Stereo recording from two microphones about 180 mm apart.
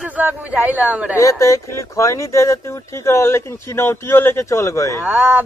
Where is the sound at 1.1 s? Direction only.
15° left (ahead or behind).